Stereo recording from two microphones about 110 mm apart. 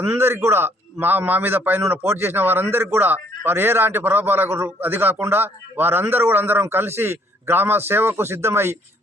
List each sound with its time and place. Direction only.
0.0 s a man's voice: 20° right (ahead or behind)